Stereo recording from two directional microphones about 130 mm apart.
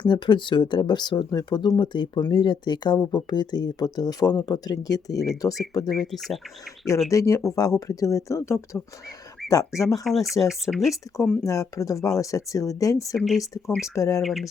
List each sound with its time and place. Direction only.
0.1 s speech: 35° left (ahead or behind)
5.5 s speech: 15° left (ahead or behind)
5.9 s speech: centre (ahead or behind)
7.1 s speech: 25° left (ahead or behind)
10.0 s speech: centre (ahead or behind)
11.2 s speech: 25° left (ahead or behind)
13.1 s speech: centre (ahead or behind)
13.4 s speech: 25° left (ahead or behind)
14.2 s speech: centre (ahead or behind)